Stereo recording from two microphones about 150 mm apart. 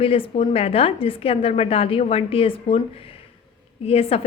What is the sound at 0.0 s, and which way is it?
A woman's voice, 40° left (ahead or behind).